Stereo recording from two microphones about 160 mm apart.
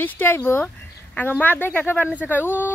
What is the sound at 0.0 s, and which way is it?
Speech, 10° left (ahead or behind).